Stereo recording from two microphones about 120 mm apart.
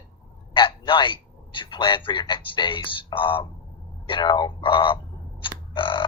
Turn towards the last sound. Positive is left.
turn(degrees=45)  # may be behind; listen again after turning